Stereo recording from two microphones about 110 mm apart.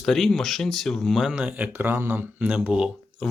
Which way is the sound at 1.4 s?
10° right (ahead or behind).